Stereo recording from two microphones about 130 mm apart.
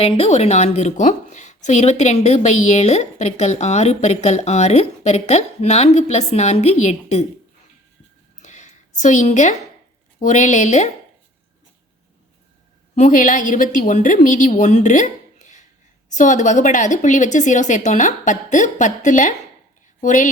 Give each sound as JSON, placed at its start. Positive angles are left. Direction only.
{"t": 0.0, "sound": "a woman's voice", "side_deg": 50}
{"t": 8.4, "sound": "a sound", "side_deg": 65}
{"t": 10.2, "sound": "a woman's voice", "side_deg": 70}
{"t": 13.0, "sound": "a woman's voice", "side_deg": 80}